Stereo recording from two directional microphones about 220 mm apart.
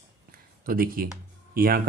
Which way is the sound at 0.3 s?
40° right (ahead or behind).